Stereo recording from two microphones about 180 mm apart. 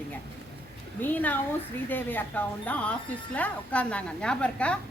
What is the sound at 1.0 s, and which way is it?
A woman's voice, 10° left (ahead or behind).